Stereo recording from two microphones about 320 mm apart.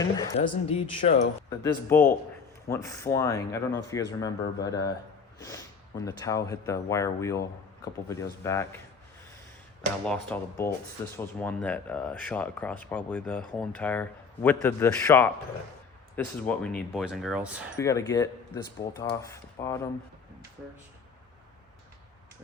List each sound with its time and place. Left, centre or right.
0.0 s speech: centre
6.1 s speech: centre
10.1 s speech: centre
17.7 s speech: centre